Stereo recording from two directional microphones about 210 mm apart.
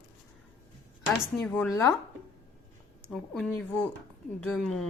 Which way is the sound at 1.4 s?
5° left (ahead or behind).